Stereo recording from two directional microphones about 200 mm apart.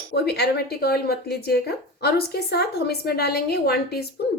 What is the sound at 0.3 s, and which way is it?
Speech, 55° left (ahead or behind).